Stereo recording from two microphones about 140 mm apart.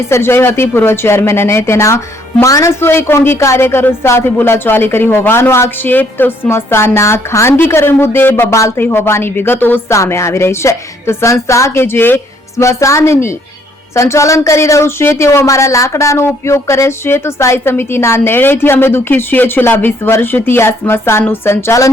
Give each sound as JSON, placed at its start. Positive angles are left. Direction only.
{"t": 0.1, "sound": "a woman's voice", "side_deg": 15}